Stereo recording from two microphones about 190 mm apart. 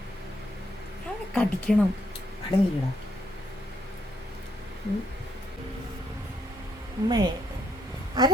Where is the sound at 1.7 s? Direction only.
Centre (ahead or behind).